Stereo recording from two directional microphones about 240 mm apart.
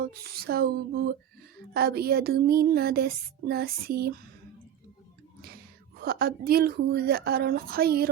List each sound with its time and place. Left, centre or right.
0.0 s speech: right
6.0 s speech: right